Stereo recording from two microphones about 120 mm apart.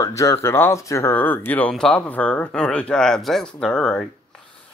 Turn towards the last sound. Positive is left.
turn(degrees=10)  # may be behind; listen again after turning